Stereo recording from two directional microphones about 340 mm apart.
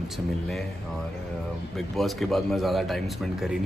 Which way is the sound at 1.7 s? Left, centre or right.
Centre.